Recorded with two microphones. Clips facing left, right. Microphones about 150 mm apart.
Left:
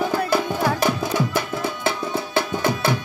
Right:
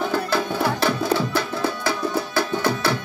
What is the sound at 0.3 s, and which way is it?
Music, 15° left (ahead or behind).